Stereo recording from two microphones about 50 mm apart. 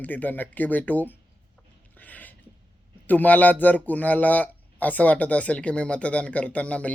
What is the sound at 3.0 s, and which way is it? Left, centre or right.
A man's voice, left.